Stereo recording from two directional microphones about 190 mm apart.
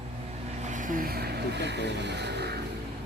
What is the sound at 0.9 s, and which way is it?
Speech, 50° right (ahead or behind).